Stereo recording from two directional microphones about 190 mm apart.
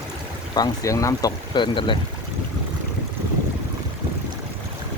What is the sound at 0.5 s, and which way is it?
Speech, 20° left (ahead or behind).